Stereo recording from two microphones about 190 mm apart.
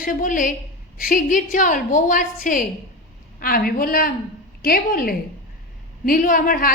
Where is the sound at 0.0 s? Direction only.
45° left (ahead or behind).